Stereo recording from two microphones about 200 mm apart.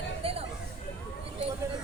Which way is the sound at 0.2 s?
30° right (ahead or behind).